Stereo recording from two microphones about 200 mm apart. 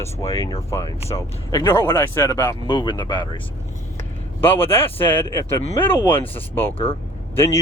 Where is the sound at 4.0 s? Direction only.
10° left (ahead or behind).